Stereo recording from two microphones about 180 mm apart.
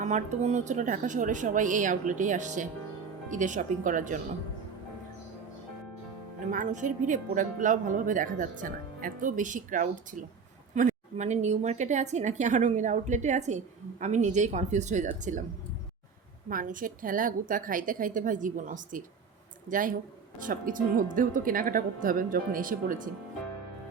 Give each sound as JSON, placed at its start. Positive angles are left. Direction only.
{"t": 0.0, "sound": "speech", "side_deg": -40}
{"t": 6.5, "sound": "a woman's voice", "side_deg": -45}
{"t": 16.5, "sound": "speech", "side_deg": -50}